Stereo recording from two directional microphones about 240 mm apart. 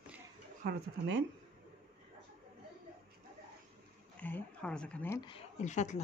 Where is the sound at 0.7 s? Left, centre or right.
Right.